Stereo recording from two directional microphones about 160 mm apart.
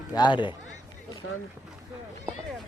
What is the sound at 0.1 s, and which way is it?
Speech, 30° left (ahead or behind).